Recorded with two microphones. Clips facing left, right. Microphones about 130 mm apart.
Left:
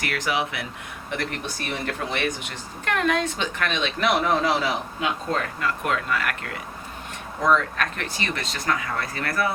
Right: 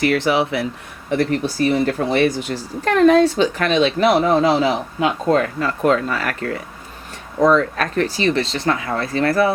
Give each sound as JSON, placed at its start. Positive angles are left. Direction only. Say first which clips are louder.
{"t": 0.0, "sound": "speech", "louder": "right 9 dB", "side_deg": -30}